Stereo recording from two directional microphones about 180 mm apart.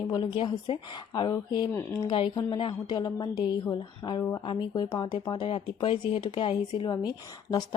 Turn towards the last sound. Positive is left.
turn(degrees=20)  # may be behind; listen again after turning